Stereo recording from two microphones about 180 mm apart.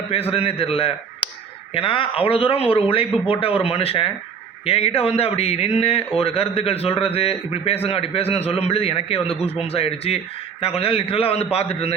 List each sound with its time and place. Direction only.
0.1 s a man's voice: 35° left (ahead or behind)